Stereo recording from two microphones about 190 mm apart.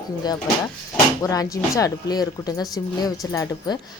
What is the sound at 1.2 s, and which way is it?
Speech, 15° left (ahead or behind).